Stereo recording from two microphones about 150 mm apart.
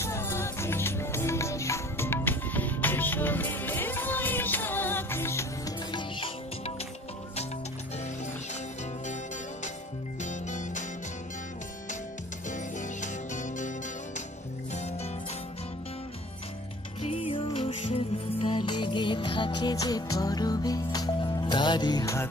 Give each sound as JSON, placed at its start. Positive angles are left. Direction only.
{"t": 0.0, "sound": "music", "side_deg": 15}
{"t": 5.9, "sound": "music", "side_deg": 35}
{"t": 10.2, "sound": "music", "side_deg": 55}
{"t": 12.4, "sound": "music", "side_deg": 55}
{"t": 17.0, "sound": "music", "side_deg": 40}